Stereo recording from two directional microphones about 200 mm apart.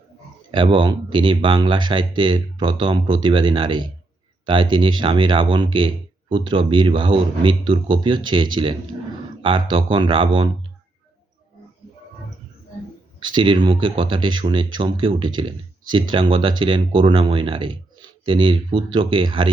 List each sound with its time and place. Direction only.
0.5 s speech: 25° right (ahead or behind)
13.2 s speech: 25° right (ahead or behind)